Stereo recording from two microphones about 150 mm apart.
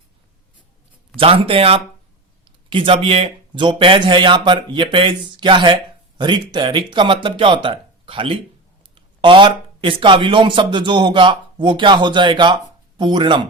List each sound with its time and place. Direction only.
1.1 s speech: 40° right (ahead or behind)